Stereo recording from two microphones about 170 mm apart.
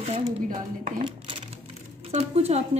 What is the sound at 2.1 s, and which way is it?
Speech, 35° right (ahead or behind).